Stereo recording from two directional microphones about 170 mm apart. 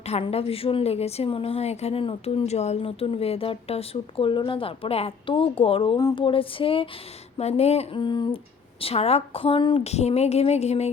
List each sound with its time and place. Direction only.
0.0 s speech: 35° left (ahead or behind)